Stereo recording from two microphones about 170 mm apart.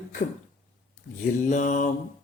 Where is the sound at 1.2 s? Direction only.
50° left (ahead or behind).